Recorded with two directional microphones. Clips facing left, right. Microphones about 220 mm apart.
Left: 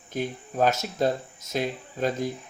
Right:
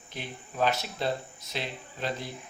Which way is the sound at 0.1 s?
45° left (ahead or behind).